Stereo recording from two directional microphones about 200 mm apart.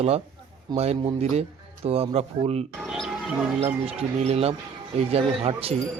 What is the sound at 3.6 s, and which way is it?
Speech, 30° right (ahead or behind).